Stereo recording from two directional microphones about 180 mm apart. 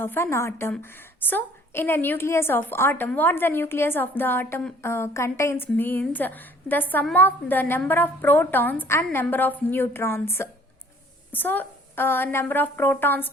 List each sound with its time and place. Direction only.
0.0 s a woman's voice: 10° left (ahead or behind)